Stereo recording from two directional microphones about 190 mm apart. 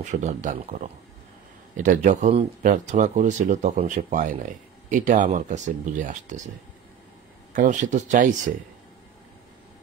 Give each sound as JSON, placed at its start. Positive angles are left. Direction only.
{"t": 0.0, "sound": "speech", "side_deg": -40}
{"t": 7.5, "sound": "speech", "side_deg": -40}